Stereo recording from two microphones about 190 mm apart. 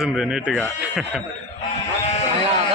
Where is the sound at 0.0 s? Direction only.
5° right (ahead or behind).